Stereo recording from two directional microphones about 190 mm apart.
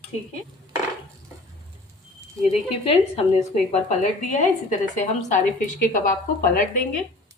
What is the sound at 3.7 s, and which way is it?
Speech, 40° left (ahead or behind).